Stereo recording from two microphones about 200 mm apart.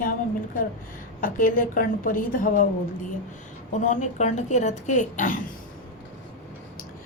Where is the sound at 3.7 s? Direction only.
35° left (ahead or behind).